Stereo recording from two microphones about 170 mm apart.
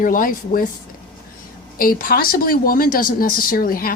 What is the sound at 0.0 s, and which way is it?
Speech, 55° left (ahead or behind).